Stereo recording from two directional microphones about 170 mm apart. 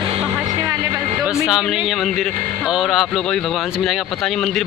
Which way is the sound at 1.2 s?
5° right (ahead or behind).